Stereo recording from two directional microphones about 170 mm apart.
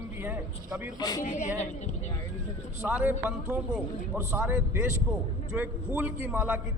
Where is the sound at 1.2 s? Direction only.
45° left (ahead or behind).